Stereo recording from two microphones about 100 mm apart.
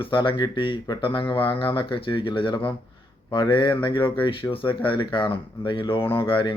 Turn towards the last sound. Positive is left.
turn(degrees=60)  # may be behind; listen again after turning